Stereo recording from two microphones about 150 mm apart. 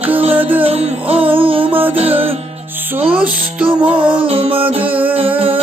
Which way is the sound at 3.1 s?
10° right (ahead or behind).